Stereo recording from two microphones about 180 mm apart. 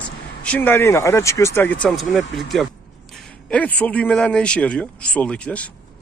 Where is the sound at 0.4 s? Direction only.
10° left (ahead or behind).